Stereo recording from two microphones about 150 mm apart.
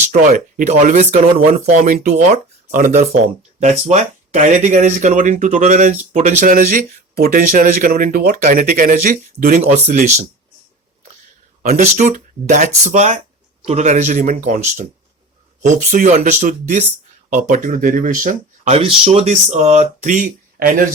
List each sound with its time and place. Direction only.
0.0 s speech: 60° right (ahead or behind)
3.6 s speech: 50° right (ahead or behind)
9.6 s speech: 45° right (ahead or behind)
11.7 s speech: 60° right (ahead or behind)
18.8 s speech: 40° right (ahead or behind); by 20.8 s 65° right (ahead or behind)